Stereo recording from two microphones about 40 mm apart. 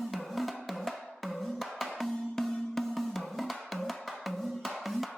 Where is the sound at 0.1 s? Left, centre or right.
Centre.